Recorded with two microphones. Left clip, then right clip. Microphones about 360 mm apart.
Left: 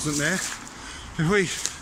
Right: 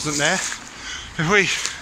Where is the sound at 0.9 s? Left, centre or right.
Centre.